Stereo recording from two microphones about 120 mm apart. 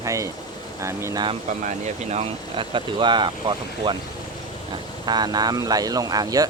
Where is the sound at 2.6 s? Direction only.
45° right (ahead or behind).